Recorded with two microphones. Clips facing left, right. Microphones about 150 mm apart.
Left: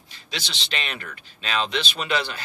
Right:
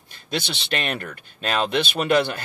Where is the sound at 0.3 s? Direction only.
55° right (ahead or behind).